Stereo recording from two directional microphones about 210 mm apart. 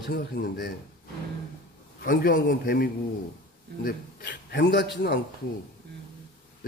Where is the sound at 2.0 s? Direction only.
45° left (ahead or behind).